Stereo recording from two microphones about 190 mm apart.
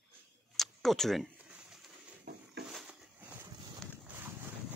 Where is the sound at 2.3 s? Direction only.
55° right (ahead or behind).